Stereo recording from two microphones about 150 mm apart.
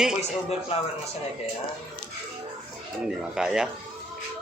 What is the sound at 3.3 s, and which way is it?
Speech, 5° right (ahead or behind).